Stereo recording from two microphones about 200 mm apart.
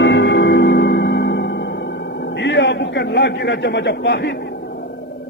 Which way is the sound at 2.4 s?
60° left (ahead or behind).